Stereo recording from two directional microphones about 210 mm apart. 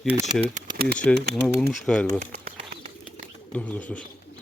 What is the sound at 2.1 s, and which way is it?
Bird, 35° right (ahead or behind).